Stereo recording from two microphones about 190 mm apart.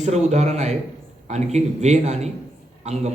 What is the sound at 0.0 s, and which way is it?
A man's voice, 35° right (ahead or behind).